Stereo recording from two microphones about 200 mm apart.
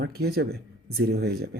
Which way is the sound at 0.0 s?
50° right (ahead or behind).